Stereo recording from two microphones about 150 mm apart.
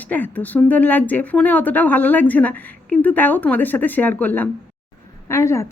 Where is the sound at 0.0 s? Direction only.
10° left (ahead or behind).